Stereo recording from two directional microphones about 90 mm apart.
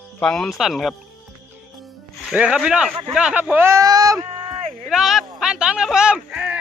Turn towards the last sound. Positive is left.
turn(degrees=-10)  # may be behind; listen again after turning